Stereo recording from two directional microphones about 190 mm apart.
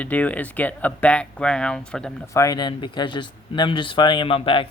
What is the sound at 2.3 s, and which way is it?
Speech, 20° left (ahead or behind).